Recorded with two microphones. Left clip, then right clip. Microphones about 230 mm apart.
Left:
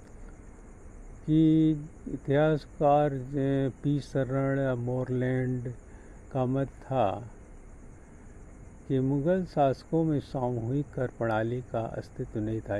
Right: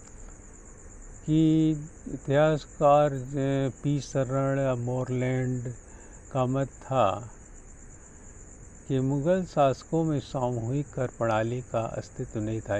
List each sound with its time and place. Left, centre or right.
1.2 s speech: centre
4.7 s speech: right
5.0 s speech: centre
9.2 s speech: centre
9.8 s speech: right
10.1 s speech: centre
10.4 s speech: right
10.7 s speech: centre